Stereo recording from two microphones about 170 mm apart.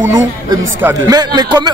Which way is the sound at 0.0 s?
15° right (ahead or behind).